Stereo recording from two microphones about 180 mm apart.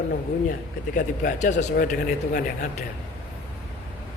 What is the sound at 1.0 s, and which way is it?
A man's voice, 45° left (ahead or behind).